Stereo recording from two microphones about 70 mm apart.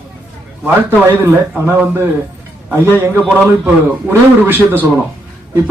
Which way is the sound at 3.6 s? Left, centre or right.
Right.